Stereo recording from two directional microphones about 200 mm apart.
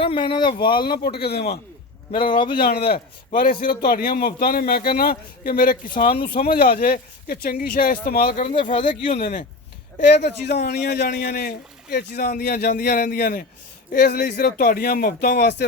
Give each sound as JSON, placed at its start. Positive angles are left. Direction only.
{"t": 0.0, "sound": "speech", "side_deg": 25}
{"t": 0.8, "sound": "a man's voice", "side_deg": 50}
{"t": 2.1, "sound": "speech", "side_deg": 25}
{"t": 3.3, "sound": "a man's voice", "side_deg": 45}
{"t": 10.2, "sound": "a man's voice", "side_deg": 55}